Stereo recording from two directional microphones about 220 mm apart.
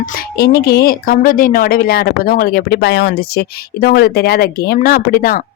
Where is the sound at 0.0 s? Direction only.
45° left (ahead or behind).